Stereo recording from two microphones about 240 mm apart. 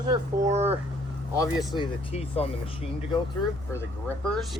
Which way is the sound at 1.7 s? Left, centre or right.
Left.